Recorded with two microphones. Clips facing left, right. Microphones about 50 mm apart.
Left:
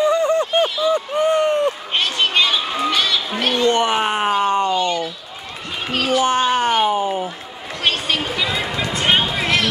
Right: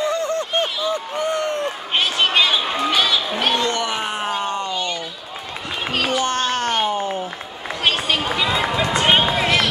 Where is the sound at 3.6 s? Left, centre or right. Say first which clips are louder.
Left 5 dB; left.